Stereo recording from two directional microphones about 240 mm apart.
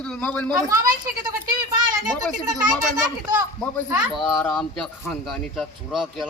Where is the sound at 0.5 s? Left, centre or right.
Centre.